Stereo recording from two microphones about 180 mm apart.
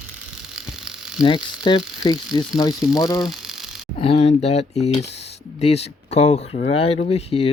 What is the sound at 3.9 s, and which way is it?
Speech, 30° left (ahead or behind).